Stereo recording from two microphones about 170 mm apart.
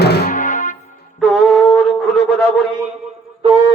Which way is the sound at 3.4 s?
25° right (ahead or behind).